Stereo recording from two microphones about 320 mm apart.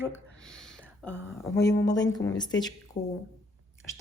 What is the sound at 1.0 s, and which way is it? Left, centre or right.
Speech, centre.